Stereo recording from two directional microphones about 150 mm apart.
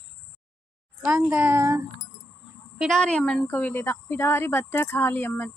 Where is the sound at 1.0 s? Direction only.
10° right (ahead or behind).